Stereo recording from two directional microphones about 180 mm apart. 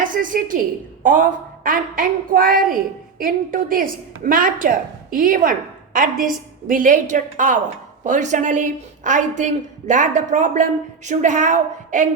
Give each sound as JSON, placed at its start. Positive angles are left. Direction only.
{"t": 0.0, "sound": "a woman's voice", "side_deg": -50}